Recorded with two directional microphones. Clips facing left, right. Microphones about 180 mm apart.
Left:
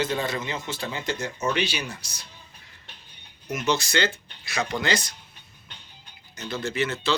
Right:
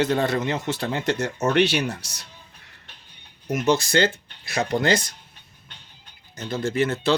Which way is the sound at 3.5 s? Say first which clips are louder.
Right 5 dB; 55° right (ahead or behind).